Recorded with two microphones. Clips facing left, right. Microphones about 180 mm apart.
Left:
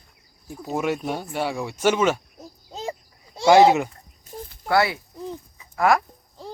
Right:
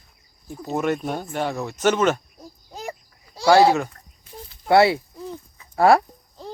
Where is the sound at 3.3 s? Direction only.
20° left (ahead or behind).